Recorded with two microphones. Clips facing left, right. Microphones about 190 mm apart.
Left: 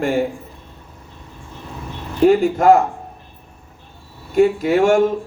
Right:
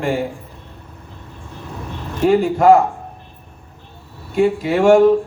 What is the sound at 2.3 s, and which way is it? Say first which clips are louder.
Speech: right 1 dB; 45° left (ahead or behind).